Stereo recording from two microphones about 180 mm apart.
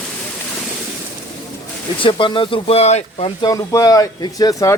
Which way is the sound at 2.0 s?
30° left (ahead or behind).